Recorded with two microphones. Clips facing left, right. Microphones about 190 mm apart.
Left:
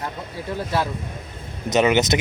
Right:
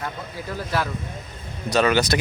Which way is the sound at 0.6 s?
25° left (ahead or behind).